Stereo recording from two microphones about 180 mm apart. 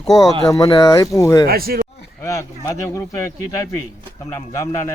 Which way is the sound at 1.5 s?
55° right (ahead or behind).